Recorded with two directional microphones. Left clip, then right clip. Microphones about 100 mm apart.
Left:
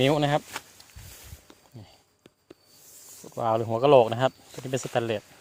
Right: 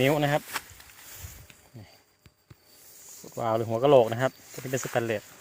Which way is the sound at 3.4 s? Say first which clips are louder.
Left 2 dB; 10° left (ahead or behind).